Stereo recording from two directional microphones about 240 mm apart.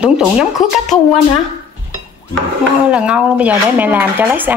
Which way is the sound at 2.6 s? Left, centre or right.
Centre.